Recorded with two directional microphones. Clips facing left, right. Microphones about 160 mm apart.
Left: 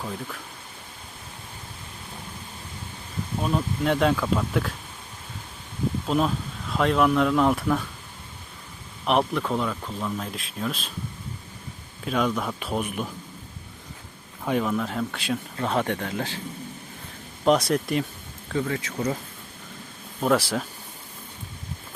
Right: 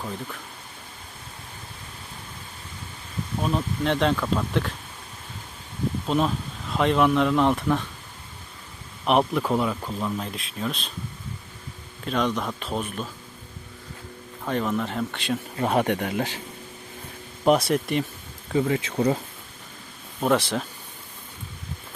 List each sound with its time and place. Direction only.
0.0 s speech: centre (ahead or behind)
3.4 s speech: 5° left (ahead or behind)
6.1 s speech: centre (ahead or behind)
9.0 s speech: centre (ahead or behind)
12.0 s speech: 5° left (ahead or behind)
14.4 s speech: 10° left (ahead or behind)
15.5 s speech: 15° right (ahead or behind)
17.7 s speech: centre (ahead or behind)
18.5 s speech: 25° right (ahead or behind)
20.2 s speech: 5° left (ahead or behind)